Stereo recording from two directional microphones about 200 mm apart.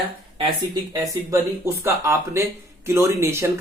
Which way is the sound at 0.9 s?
15° right (ahead or behind).